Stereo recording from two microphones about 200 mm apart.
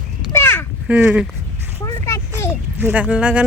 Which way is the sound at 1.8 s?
15° left (ahead or behind).